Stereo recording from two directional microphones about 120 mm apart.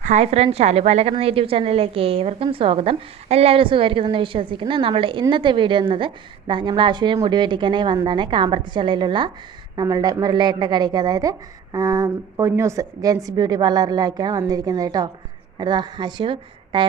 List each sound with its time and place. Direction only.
0.0 s a woman's voice: 80° right; by 1.1 s 60° right (ahead or behind)
1.1 s a woman's voice: 50° right (ahead or behind)